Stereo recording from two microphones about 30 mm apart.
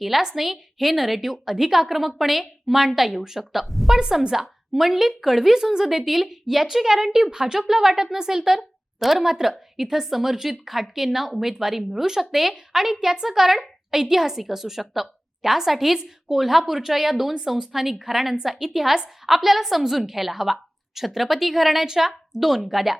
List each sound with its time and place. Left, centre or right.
0.3 s a woman's voice: centre
3.9 s a woman's voice: centre
4.7 s a woman's voice: centre
9.0 s a woman's voice: centre